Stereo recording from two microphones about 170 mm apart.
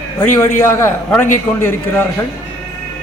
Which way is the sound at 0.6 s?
15° left (ahead or behind).